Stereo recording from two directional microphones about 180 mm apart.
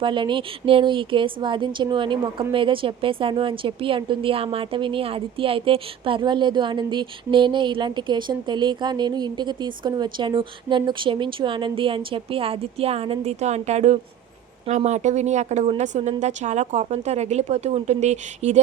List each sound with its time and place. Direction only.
0.0 s a woman's voice: 25° right (ahead or behind)